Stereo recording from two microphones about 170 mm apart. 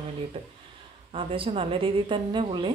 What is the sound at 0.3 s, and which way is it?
A woman's voice, 30° right (ahead or behind).